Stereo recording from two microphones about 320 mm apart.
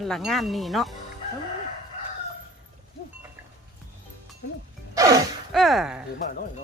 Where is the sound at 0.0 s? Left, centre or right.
Centre.